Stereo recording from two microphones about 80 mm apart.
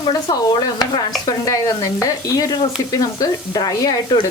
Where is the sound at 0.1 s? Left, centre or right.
Left.